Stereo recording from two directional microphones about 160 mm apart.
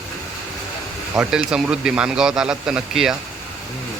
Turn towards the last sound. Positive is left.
turn(degrees=-5)  # may be behind; listen again after turning